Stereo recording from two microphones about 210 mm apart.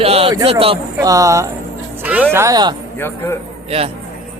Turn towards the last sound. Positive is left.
turn(degrees=-30)  # may be behind; listen again after turning